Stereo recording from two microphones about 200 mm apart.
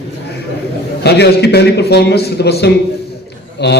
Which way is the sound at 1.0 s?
55° left (ahead or behind).